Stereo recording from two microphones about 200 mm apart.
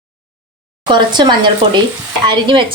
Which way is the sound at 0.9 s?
25° right (ahead or behind).